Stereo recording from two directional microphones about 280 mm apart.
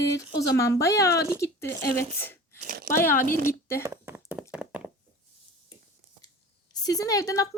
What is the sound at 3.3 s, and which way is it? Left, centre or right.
Speech, right.